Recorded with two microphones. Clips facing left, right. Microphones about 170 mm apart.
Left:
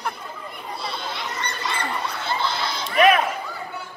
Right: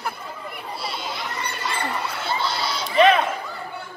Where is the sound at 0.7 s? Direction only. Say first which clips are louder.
Left 1 dB; 5° right (ahead or behind).